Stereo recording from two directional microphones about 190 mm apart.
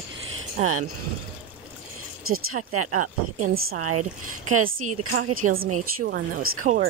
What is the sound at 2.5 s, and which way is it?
Speech, 45° right (ahead or behind).